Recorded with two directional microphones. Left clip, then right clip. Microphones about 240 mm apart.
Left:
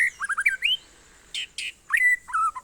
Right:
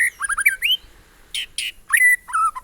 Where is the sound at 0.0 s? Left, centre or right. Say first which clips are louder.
Right 4 dB; centre.